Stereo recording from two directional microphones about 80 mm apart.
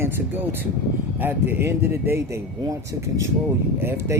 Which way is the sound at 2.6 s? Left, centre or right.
Right.